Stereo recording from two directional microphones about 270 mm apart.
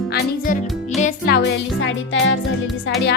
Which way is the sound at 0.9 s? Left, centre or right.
Left.